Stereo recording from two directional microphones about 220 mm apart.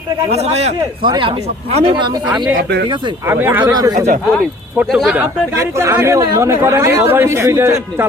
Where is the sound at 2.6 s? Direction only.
45° right (ahead or behind).